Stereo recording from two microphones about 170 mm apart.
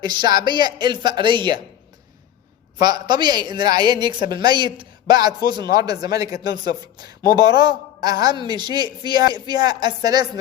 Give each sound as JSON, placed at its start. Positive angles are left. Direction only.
{"t": 0.0, "sound": "a man's voice", "side_deg": -25}
{"t": 2.8, "sound": "a man's voice", "side_deg": -25}